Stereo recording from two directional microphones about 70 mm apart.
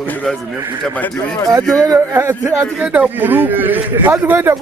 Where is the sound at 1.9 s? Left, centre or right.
Right.